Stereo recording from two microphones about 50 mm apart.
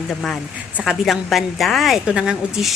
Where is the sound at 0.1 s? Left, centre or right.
Centre.